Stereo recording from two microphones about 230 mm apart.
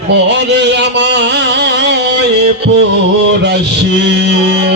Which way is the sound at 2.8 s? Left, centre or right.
Right.